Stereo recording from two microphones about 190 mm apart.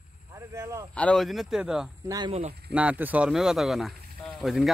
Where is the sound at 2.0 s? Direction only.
20° right (ahead or behind).